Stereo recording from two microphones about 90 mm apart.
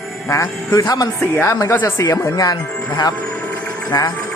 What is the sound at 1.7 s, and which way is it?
Speech, 25° left (ahead or behind).